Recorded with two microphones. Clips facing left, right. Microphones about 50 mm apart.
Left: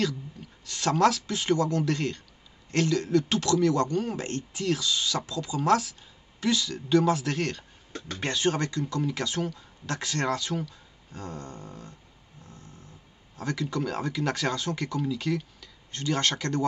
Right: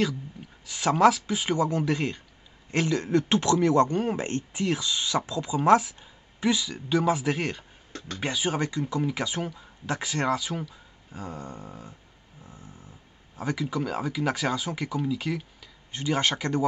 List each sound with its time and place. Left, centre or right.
0.0 s speech: centre
12.4 s dog: centre
13.4 s speech: centre